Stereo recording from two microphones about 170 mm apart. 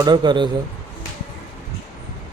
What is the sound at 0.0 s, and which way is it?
Speech, 25° right (ahead or behind).